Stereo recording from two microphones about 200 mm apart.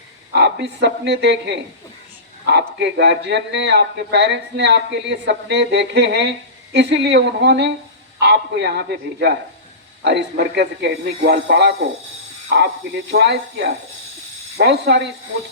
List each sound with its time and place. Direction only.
0.3 s speech: 60° right (ahead or behind)